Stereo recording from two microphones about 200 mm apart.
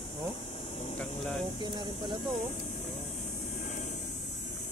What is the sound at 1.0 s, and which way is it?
Speech, 5° left (ahead or behind).